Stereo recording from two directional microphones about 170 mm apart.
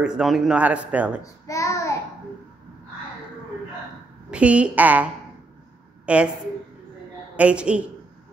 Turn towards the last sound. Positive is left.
turn(degrees=-5)  # may be behind; listen again after turning